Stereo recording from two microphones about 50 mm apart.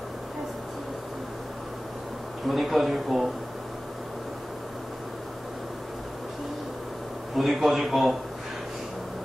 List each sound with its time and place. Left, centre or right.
2.4 s a man's voice: centre
7.3 s a man's voice: centre